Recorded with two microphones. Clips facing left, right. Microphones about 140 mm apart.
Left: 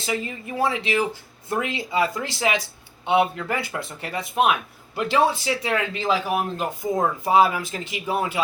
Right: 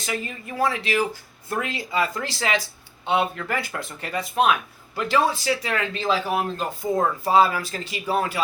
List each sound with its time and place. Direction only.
0.0 s speech: 25° left (ahead or behind)